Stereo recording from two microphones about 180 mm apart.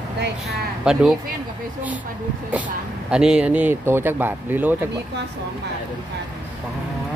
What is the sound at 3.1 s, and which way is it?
Speech, 5° right (ahead or behind).